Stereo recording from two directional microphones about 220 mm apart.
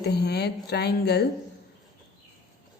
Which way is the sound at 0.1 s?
50° left (ahead or behind).